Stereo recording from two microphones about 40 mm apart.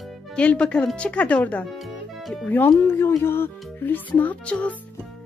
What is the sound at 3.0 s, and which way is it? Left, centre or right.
Music, left.